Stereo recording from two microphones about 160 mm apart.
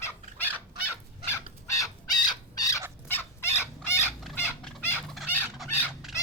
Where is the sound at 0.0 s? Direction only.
15° left (ahead or behind).